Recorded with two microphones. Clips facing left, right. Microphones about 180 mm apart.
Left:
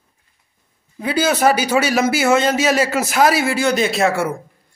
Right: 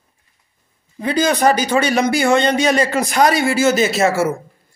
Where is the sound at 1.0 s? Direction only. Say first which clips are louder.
Right 1 dB; 5° left (ahead or behind).